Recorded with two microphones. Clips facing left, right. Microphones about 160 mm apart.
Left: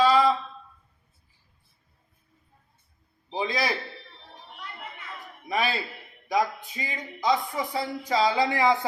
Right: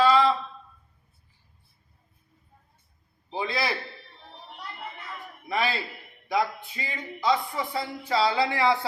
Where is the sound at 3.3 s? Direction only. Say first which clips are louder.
Left 1 dB; 15° left (ahead or behind).